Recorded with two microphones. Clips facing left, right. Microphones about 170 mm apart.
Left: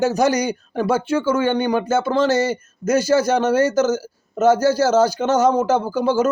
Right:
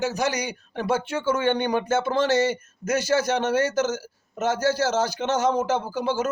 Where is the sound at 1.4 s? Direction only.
25° right (ahead or behind).